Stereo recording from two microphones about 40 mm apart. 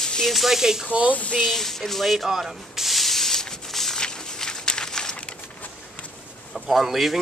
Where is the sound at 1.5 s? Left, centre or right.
Centre.